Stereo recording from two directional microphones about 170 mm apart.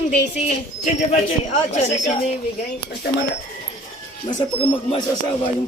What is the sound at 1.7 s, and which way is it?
Speech, 45° left (ahead or behind).